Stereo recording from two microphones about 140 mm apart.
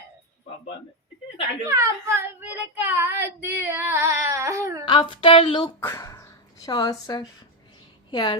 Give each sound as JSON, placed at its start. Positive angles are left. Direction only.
{"t": 1.6, "sound": "child singing", "side_deg": -20}
{"t": 4.9, "sound": "speech", "side_deg": 35}
{"t": 5.8, "sound": "a sound", "side_deg": 20}
{"t": 8.1, "sound": "speech", "side_deg": 30}